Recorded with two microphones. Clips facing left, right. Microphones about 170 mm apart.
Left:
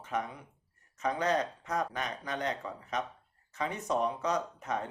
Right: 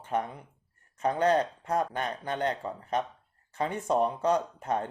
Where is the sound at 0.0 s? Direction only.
30° right (ahead or behind).